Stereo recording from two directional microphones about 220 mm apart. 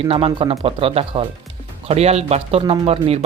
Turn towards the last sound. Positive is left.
turn(degrees=-25)  # may be behind; listen again after turning